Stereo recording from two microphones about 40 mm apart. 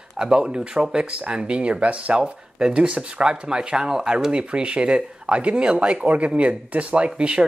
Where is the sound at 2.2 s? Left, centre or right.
Centre.